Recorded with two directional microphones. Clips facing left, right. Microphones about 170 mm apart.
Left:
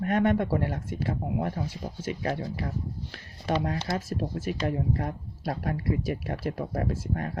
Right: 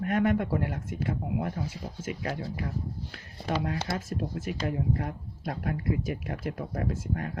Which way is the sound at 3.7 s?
35° left (ahead or behind).